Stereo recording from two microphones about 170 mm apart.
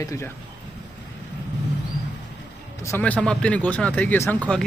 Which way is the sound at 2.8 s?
10° left (ahead or behind).